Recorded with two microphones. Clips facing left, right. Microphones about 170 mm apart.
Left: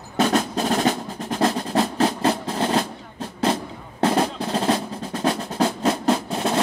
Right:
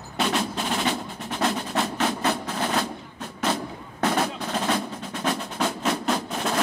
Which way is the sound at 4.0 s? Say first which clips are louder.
Left 4 dB; 30° left (ahead or behind).